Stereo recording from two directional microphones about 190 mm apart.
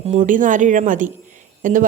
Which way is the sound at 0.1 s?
45° right (ahead or behind).